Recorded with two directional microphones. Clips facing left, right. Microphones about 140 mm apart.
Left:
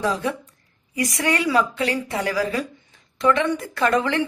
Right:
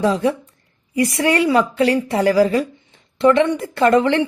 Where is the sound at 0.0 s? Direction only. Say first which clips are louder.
Right 6 dB; 30° right (ahead or behind).